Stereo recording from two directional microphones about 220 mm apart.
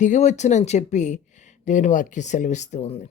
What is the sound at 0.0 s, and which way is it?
Speech, 35° left (ahead or behind).